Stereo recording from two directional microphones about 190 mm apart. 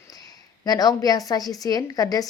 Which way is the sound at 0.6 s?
20° left (ahead or behind).